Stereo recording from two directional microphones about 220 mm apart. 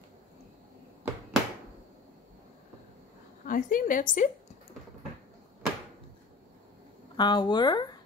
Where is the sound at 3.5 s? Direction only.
40° left (ahead or behind).